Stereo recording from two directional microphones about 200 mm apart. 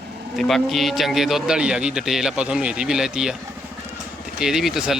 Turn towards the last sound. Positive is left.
turn(degrees=-5)  # may be behind; listen again after turning